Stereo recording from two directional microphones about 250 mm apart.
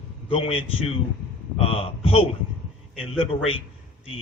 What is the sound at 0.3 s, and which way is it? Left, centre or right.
A man's voice, left.